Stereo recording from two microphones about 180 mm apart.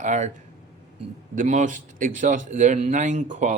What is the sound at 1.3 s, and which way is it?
A man's voice, 45° right (ahead or behind).